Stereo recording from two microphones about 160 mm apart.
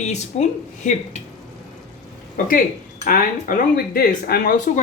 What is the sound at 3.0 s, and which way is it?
Speech, 60° left (ahead or behind).